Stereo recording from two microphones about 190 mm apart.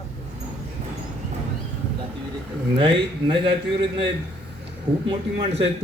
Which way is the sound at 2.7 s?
25° right (ahead or behind).